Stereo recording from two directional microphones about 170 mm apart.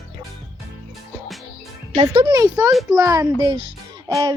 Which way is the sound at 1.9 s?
30° right (ahead or behind).